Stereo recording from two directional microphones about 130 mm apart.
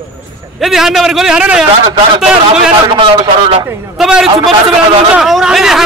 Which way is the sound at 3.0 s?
45° right (ahead or behind).